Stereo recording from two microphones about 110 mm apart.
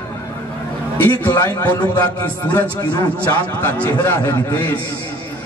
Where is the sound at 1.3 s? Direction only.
35° left (ahead or behind).